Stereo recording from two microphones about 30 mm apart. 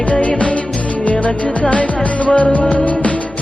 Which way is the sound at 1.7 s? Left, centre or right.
Left.